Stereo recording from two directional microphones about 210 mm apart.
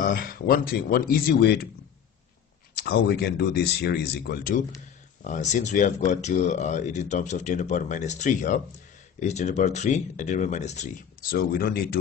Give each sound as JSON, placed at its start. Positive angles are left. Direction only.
{"t": 0.0, "sound": "speech", "side_deg": 45}
{"t": 2.8, "sound": "speech", "side_deg": 50}